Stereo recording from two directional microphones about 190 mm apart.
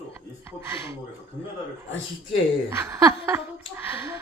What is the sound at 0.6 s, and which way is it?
Speech, 15° right (ahead or behind).